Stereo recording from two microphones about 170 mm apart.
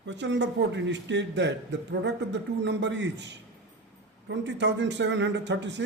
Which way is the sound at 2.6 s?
90° right.